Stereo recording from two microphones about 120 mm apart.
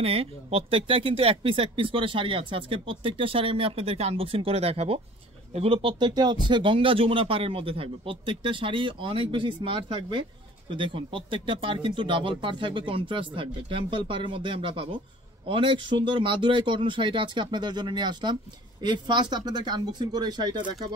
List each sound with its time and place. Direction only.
0.0 s speech: 55° right (ahead or behind); by 20.6 s 35° right (ahead or behind)